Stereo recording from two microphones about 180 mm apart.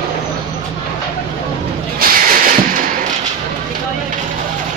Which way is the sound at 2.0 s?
50° right (ahead or behind).